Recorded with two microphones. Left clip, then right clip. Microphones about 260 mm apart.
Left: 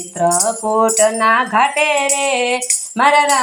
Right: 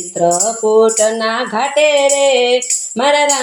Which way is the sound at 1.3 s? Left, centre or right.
Left.